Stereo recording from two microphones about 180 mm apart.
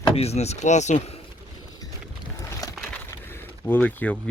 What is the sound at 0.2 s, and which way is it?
Speech, 35° left (ahead or behind).